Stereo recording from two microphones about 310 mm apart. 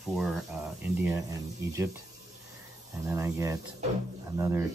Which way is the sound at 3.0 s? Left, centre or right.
Centre.